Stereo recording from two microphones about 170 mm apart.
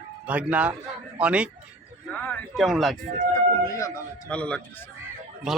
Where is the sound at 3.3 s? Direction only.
20° left (ahead or behind).